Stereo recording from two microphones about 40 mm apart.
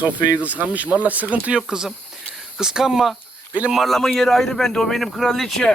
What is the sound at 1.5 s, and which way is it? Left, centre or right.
Speech, centre.